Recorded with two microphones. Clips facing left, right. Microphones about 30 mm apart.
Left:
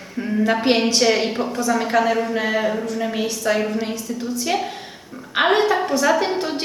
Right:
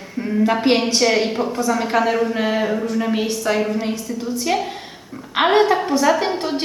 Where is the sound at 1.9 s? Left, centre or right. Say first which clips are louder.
Even; centre.